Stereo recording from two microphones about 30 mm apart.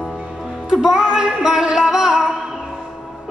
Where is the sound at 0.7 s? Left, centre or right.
Right.